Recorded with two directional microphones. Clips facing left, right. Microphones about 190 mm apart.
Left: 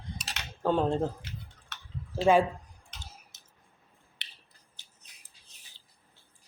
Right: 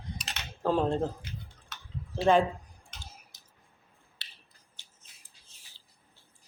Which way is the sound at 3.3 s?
20° left (ahead or behind).